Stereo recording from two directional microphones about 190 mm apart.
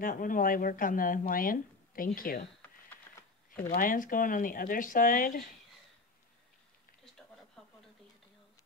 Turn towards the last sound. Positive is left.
turn(degrees=0)  # may be behind; listen again after turning